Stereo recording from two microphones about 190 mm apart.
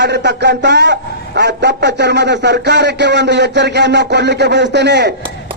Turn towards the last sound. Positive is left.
turn(degrees=-65)  # may be behind; listen again after turning